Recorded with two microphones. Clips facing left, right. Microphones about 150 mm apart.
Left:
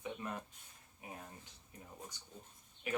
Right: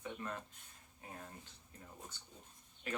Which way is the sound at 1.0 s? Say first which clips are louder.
Left 2 dB; 15° left (ahead or behind).